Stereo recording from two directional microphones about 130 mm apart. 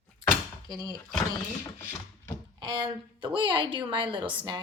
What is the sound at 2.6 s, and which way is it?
A woman's voice, 35° right (ahead or behind).